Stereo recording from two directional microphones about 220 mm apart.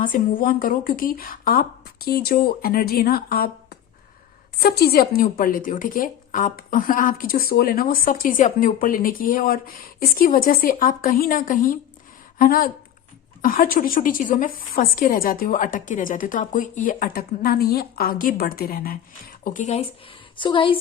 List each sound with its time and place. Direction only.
0.0 s a woman's voice: 40° left (ahead or behind); by 20.7 s 25° left (ahead or behind)